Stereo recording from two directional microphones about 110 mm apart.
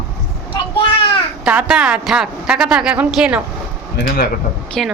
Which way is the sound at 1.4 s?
10° right (ahead or behind).